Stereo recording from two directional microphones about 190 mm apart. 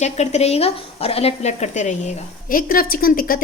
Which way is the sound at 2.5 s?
50° left (ahead or behind).